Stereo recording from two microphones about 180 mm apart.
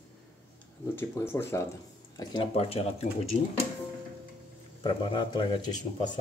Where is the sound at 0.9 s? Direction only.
15° left (ahead or behind).